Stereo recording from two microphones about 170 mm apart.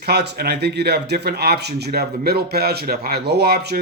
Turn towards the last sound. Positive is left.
turn(degrees=-70)  # may be behind; listen again after turning